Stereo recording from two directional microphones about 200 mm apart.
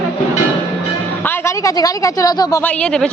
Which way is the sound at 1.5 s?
15° left (ahead or behind).